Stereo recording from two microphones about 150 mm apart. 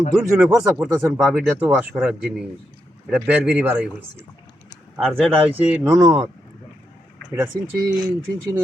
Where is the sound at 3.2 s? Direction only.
10° right (ahead or behind).